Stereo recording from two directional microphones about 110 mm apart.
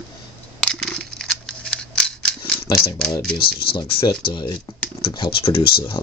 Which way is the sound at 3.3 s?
50° left (ahead or behind).